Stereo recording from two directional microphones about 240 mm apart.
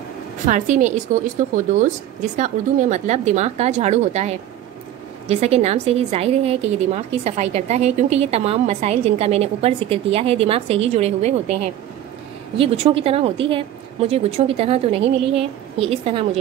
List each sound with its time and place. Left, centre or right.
0.5 s a woman's voice: right
12.5 s a woman's voice: right